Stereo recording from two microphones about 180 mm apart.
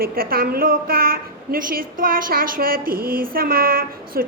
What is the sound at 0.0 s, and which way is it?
A woman's voice, 55° right (ahead or behind).